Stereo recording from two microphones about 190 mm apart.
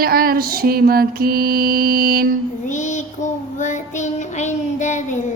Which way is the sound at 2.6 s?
40° left (ahead or behind).